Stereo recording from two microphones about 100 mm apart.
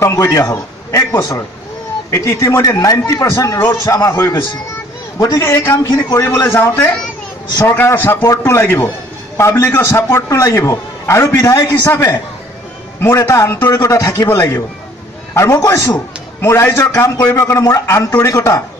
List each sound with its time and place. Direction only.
0.0 s a man's voice: 30° left (ahead or behind)
5.8 s a man's voice: 40° left (ahead or behind)
6.4 s a man's voice: 25° left (ahead or behind)